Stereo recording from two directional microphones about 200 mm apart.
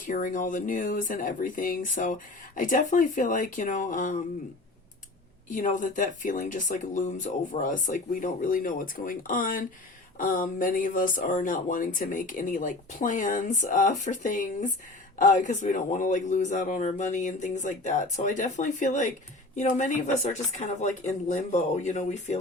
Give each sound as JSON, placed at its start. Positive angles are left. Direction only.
{"t": 0.0, "sound": "speech", "side_deg": 40}
{"t": 5.5, "sound": "speech", "side_deg": 40}